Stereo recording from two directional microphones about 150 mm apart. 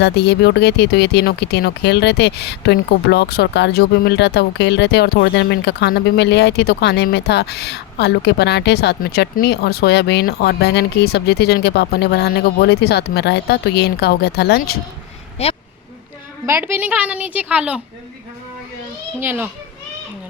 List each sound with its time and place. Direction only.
0.0 s speech: 90° left
15.4 s speech: 40° left (ahead or behind)
16.5 s a woman's voice: 15° right (ahead or behind)
19.2 s a woman's voice: 15° right (ahead or behind)